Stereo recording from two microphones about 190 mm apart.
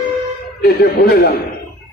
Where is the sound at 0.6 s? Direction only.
55° left (ahead or behind).